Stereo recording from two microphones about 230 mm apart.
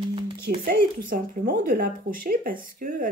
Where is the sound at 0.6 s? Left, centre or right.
Right.